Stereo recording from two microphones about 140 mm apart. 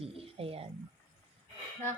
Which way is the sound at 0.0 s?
45° right (ahead or behind).